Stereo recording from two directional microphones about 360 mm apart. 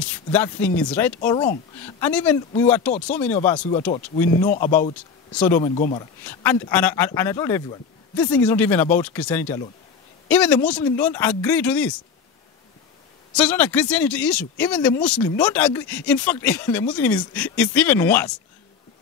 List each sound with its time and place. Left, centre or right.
0.0 s speech: centre
3.5 s speech: centre
5.3 s speech: centre
5.6 s speech: centre
13.3 s speech: centre